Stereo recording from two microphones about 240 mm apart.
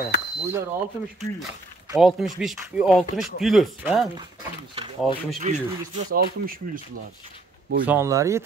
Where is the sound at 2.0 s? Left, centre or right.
Centre.